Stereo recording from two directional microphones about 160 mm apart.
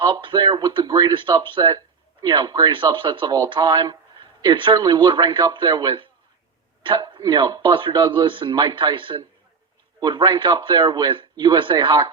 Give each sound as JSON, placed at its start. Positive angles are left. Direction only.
{"t": 0.0, "sound": "speech", "side_deg": -30}